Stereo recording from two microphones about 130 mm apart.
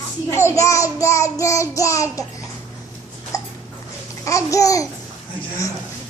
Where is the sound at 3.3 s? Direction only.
25° left (ahead or behind).